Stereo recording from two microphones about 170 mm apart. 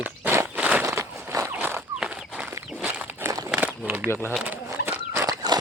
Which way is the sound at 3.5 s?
10° right (ahead or behind).